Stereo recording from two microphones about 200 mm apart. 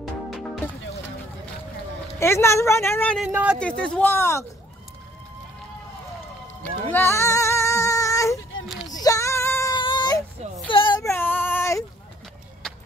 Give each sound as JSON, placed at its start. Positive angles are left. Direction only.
{"t": 0.0, "sound": "music", "side_deg": 0}
{"t": 2.1, "sound": "speech", "side_deg": 15}
{"t": 3.2, "sound": "speech", "side_deg": -5}
{"t": 3.5, "sound": "speech", "side_deg": 5}
{"t": 6.9, "sound": "child singing", "side_deg": 10}
{"t": 8.6, "sound": "a sound", "side_deg": 0}
{"t": 8.9, "sound": "female singing", "side_deg": 15}
{"t": 9.8, "sound": "baby cry", "side_deg": 25}
{"t": 10.7, "sound": "child singing", "side_deg": 25}
{"t": 12.6, "sound": "a sound", "side_deg": 5}